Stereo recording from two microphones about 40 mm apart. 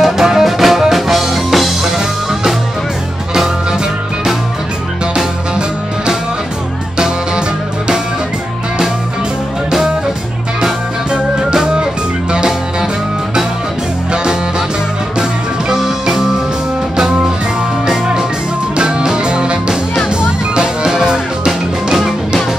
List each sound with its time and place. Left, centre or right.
0.0 s music: centre
11.1 s music: right
15.7 s music: centre
18.8 s music: centre
21.9 s music: centre